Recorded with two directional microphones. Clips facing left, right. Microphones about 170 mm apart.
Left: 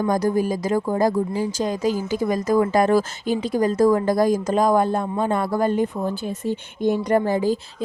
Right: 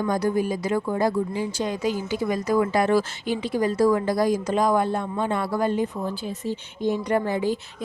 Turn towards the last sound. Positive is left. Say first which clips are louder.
# left 4 dB
turn(degrees=40)  # may be behind; listen again after turning